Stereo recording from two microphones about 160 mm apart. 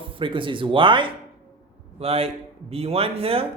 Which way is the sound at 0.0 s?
30° right (ahead or behind).